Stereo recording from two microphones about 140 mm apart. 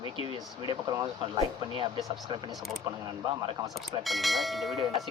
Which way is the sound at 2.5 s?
Centre (ahead or behind).